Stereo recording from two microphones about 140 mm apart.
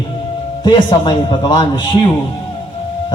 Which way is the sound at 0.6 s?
35° left (ahead or behind).